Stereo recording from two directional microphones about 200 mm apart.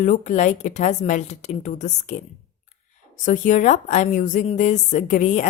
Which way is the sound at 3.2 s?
40° left (ahead or behind).